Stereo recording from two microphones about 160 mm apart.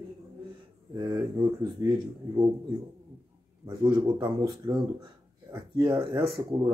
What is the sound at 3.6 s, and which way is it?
Speech, 25° right (ahead or behind).